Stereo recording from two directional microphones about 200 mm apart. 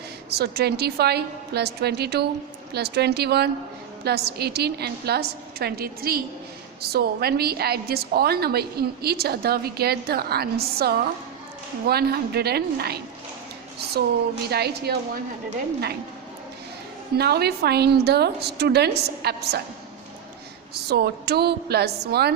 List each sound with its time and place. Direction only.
0.3 s a woman's voice: 55° right (ahead or behind)
14.5 s a woman's voice: 55° right (ahead or behind)
17.2 s a woman's voice: 55° right (ahead or behind)
20.7 s a woman's voice: 55° right (ahead or behind)